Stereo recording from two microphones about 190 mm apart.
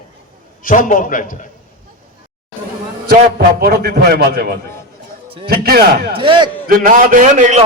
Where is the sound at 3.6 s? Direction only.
55° right (ahead or behind).